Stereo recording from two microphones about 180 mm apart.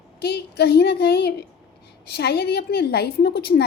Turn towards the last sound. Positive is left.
turn(degrees=60)  # may be behind; listen again after turning